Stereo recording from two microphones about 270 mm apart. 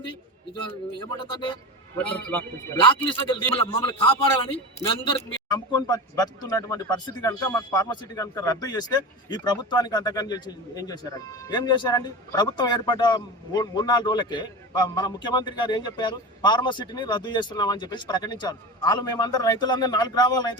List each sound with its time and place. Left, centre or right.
0.9 s speech: centre
2.0 s speech: centre
2.8 s a man's voice: centre